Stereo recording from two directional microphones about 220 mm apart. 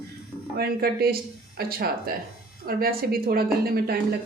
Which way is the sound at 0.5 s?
45° right (ahead or behind).